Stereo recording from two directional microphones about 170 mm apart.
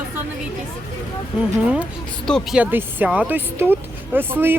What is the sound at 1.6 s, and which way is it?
Speech, 5° right (ahead or behind).